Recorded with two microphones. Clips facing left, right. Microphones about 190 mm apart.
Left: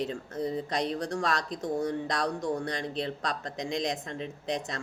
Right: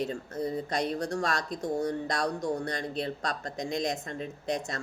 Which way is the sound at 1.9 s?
20° left (ahead or behind).